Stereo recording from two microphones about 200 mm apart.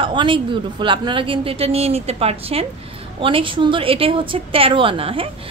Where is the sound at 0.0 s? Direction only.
25° right (ahead or behind).